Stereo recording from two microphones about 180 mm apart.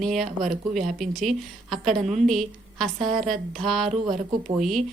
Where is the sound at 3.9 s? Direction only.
45° right (ahead or behind).